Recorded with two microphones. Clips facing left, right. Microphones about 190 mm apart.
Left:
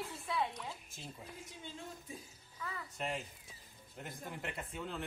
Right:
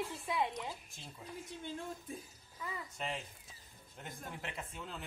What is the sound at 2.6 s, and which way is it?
Speech, 15° right (ahead or behind).